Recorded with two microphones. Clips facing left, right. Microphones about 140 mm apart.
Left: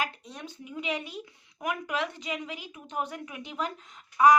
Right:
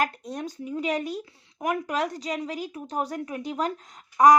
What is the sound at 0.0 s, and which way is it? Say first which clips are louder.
Speech: right 7 dB; 45° right (ahead or behind).